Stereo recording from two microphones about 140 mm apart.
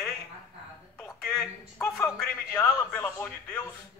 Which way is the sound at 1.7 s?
20° left (ahead or behind).